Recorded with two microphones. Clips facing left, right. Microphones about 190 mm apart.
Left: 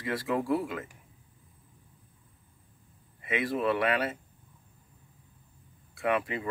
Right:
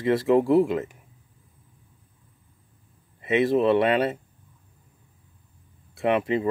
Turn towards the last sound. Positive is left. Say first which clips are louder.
# right 7 dB
turn(degrees=-25)  # may be behind; listen again after turning